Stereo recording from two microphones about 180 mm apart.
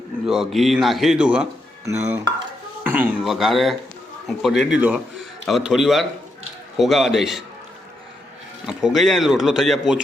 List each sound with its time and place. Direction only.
0.3 s a man's voice: centre (ahead or behind)
8.6 s a man's voice: centre (ahead or behind)